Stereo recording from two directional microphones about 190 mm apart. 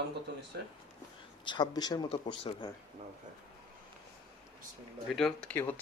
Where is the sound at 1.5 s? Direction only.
20° left (ahead or behind).